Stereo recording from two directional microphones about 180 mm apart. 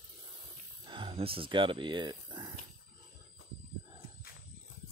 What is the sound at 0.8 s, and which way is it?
Speech, 30° right (ahead or behind).